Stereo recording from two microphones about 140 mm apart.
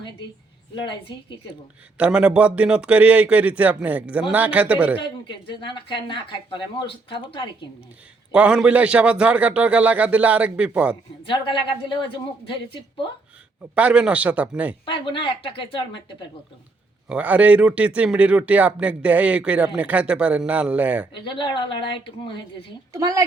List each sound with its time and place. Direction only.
0.9 s speech: 35° left (ahead or behind)
2.0 s speech: 5° right (ahead or behind)
4.9 s speech: 35° left (ahead or behind)
8.3 s speech: 5° right (ahead or behind)
11.2 s speech: 35° left (ahead or behind)
13.7 s speech: 10° right (ahead or behind)
14.8 s speech: 40° left (ahead or behind)
17.1 s speech: 10° right (ahead or behind)
21.1 s speech: 35° left (ahead or behind)
22.9 s a woman's voice: 25° right (ahead or behind)